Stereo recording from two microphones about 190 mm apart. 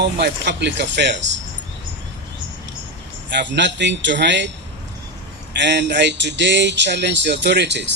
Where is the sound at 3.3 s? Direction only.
65° right (ahead or behind).